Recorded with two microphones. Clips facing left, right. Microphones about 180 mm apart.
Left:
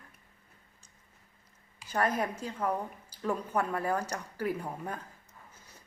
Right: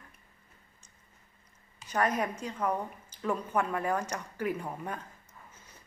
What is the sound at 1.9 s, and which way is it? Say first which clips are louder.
Speech: right 1 dB; 30° left (ahead or behind).